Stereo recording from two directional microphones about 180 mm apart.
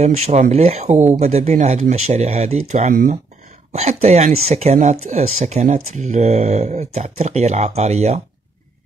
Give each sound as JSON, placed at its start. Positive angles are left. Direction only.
{"t": 0.0, "sound": "speech", "side_deg": -40}